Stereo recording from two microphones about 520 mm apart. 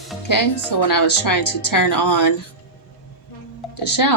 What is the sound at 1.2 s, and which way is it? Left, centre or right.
A woman's voice, left.